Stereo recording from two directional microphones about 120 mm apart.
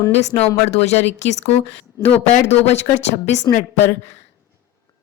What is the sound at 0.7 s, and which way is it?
Speech, 65° left (ahead or behind).